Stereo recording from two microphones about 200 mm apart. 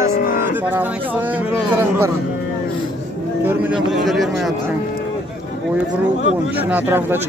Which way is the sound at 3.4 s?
5° right (ahead or behind).